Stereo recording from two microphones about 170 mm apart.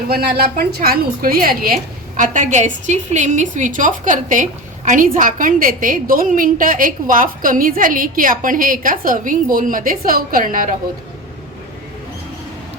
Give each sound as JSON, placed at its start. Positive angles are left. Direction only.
{"t": 0.1, "sound": "a woman's voice", "side_deg": -65}